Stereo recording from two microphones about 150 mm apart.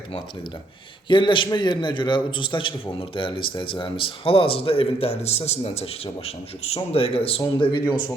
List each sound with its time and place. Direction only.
1.0 s speech: 30° left (ahead or behind)